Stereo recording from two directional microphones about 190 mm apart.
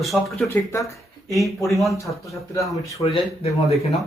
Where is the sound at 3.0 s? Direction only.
30° left (ahead or behind).